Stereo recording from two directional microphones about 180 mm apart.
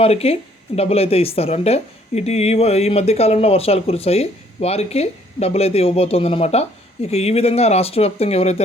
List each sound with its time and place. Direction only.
0.0 s a woman's voice: 35° left (ahead or behind)